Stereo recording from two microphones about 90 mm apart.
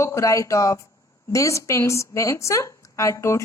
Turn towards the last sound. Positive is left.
turn(degrees=35)  # may be behind; listen again after turning